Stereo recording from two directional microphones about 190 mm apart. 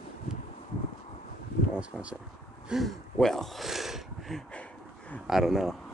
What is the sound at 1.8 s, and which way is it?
Speech, 5° right (ahead or behind).